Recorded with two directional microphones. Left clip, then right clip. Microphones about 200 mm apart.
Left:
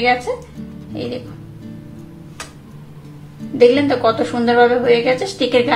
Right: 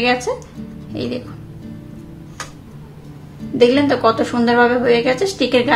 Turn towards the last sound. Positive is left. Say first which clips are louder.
# even
turn(degrees=-15)  # may be behind; listen again after turning